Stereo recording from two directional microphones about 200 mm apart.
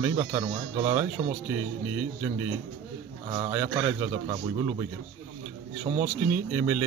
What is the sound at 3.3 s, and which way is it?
A man's voice, 20° right (ahead or behind).